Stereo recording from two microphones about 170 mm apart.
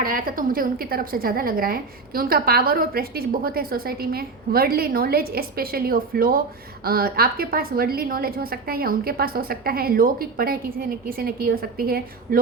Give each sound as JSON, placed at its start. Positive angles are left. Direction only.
{"t": 0.0, "sound": "a woman's voice", "side_deg": -55}